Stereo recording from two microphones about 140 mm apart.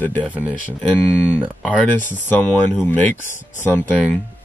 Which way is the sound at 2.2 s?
10° left (ahead or behind).